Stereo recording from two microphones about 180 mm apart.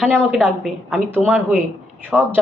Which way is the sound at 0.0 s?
5° right (ahead or behind).